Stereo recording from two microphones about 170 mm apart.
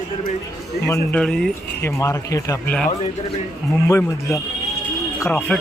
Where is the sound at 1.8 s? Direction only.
15° left (ahead or behind).